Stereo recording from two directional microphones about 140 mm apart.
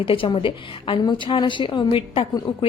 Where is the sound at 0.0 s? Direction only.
40° left (ahead or behind).